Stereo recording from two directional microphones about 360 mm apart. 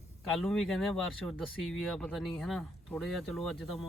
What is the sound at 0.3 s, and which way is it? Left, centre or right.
Speech, centre.